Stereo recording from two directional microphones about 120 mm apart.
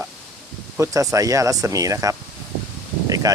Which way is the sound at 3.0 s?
30° right (ahead or behind).